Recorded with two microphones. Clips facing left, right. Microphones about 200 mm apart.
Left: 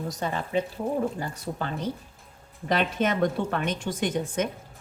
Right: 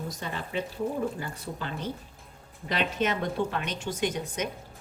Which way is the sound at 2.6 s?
50° left (ahead or behind).